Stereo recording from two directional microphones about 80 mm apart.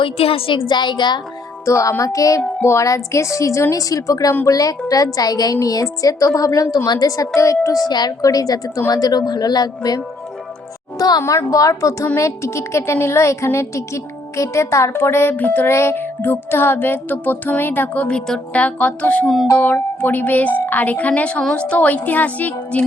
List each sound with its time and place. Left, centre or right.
0.0 s a woman's voice: left
1.6 s a woman's voice: left
10.9 s music: left
11.2 s a woman's voice: left
11.5 s a woman's voice: left
15.7 s music: left
18.3 s speech: centre
20.0 s music: left